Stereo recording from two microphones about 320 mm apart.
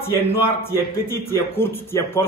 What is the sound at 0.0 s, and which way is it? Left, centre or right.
A man's voice, centre.